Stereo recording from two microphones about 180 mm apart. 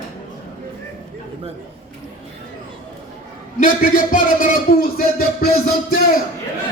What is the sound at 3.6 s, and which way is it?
Speech, 50° left (ahead or behind).